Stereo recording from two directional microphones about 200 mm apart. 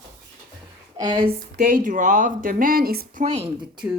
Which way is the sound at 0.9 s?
20° right (ahead or behind).